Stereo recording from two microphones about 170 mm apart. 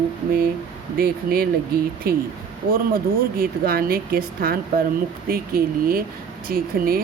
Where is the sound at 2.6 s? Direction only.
55° right (ahead or behind).